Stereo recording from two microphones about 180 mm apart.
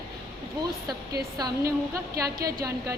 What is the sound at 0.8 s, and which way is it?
A woman's voice, 20° right (ahead or behind).